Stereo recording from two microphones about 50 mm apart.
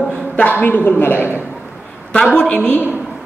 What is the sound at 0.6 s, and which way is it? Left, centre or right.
Speech, left.